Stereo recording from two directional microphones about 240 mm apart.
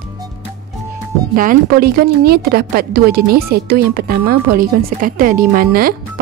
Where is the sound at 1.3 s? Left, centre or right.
Right.